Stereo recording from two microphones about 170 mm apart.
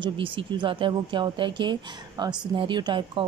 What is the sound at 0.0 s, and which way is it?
Speech, 30° right (ahead or behind).